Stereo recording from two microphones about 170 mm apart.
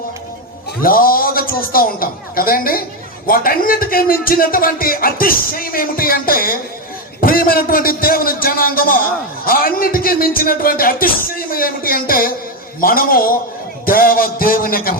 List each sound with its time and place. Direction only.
0.8 s a man's voice: 55° left (ahead or behind)